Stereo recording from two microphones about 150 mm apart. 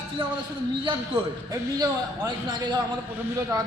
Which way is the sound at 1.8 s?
30° right (ahead or behind).